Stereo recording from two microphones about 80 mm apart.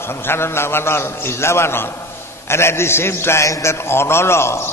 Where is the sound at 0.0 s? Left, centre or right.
Left.